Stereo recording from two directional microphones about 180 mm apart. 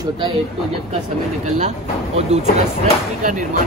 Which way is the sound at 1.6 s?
40° right (ahead or behind).